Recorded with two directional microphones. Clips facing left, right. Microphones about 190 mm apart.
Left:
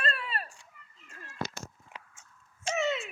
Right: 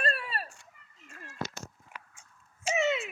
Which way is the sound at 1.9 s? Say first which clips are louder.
Left 1 dB; 25° left (ahead or behind).